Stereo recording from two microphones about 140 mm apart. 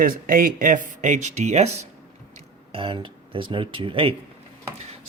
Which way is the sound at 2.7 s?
40° right (ahead or behind).